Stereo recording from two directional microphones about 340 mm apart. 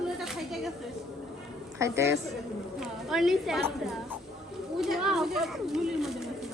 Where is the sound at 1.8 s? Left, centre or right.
Centre.